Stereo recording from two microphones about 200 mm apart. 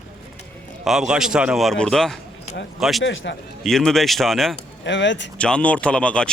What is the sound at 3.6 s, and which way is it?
Speech, centre (ahead or behind).